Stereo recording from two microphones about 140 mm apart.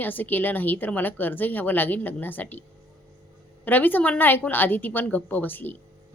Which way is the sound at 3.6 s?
15° left (ahead or behind).